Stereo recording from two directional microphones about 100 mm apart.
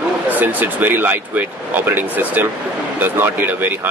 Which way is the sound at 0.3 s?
15° right (ahead or behind).